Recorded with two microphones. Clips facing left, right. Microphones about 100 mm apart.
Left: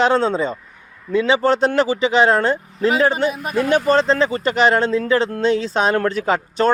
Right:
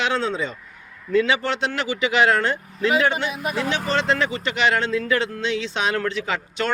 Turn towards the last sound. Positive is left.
turn(degrees=40)  # may be behind; listen again after turning